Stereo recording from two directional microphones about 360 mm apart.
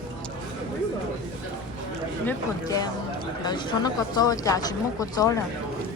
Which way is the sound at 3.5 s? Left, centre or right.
Centre.